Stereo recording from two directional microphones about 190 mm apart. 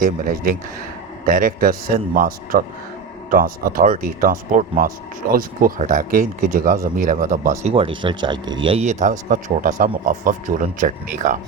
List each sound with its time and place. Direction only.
0.0 s speech: 50° right (ahead or behind)
7.6 s speech: 30° right (ahead or behind)